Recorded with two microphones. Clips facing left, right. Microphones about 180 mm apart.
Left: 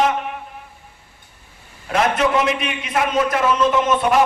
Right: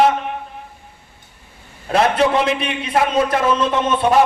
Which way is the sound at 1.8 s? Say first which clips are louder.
Right 3 dB; 30° right (ahead or behind).